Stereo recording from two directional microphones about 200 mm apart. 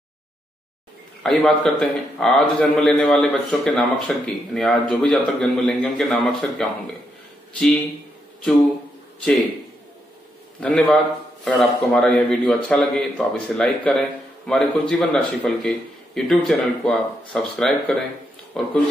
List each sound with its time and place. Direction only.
1.2 s a man's voice: 5° left (ahead or behind)
10.6 s a man's voice: 5° left (ahead or behind)